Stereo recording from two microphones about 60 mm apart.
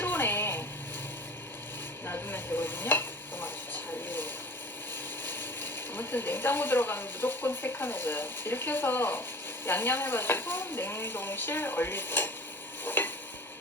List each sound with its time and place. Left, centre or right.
0.0 s a sound: left
2.0 s stir: left
5.2 s speech: left
12.8 s stir: left